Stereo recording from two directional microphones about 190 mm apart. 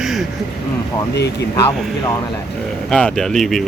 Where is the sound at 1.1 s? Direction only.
60° left (ahead or behind).